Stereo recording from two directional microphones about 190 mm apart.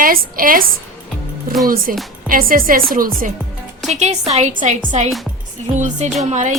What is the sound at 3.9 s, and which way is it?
Speech, 35° right (ahead or behind).